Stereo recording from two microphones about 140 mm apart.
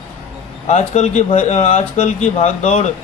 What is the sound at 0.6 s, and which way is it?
Speech, 55° left (ahead or behind).